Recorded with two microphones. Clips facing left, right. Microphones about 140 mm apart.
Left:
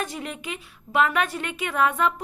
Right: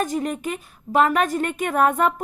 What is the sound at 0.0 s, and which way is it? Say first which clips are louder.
A woman's voice: right 8 dB; 45° right (ahead or behind).